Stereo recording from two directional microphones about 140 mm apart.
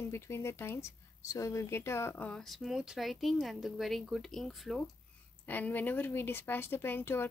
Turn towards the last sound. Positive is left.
turn(degrees=15)  # may be behind; listen again after turning